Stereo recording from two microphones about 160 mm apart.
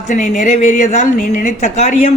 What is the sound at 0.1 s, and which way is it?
Speech, 50° left (ahead or behind).